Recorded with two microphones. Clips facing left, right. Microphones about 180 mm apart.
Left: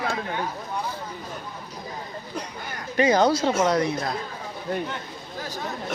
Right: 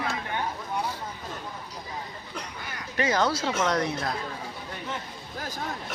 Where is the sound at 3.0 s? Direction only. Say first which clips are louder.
Left 6 dB; 15° left (ahead or behind).